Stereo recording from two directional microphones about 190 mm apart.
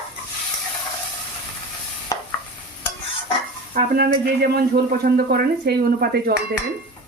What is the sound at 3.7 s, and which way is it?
Speech, 55° right (ahead or behind).